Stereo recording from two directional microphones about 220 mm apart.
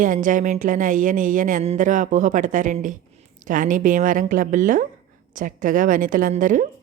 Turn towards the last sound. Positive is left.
turn(degrees=-35)  # may be behind; listen again after turning